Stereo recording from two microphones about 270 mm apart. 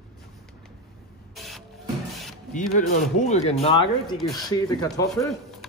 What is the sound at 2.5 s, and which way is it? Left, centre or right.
Speech, left.